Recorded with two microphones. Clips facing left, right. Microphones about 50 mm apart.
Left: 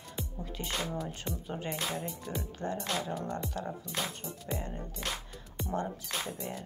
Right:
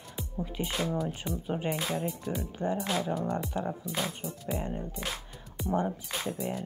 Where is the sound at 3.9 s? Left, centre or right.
Centre.